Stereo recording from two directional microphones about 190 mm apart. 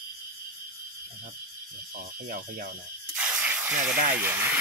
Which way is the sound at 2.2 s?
45° right (ahead or behind).